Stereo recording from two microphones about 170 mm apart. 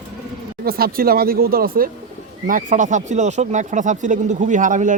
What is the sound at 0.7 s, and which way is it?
Speech, 60° right (ahead or behind).